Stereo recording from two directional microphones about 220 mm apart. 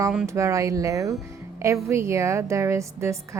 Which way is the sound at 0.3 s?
15° right (ahead or behind).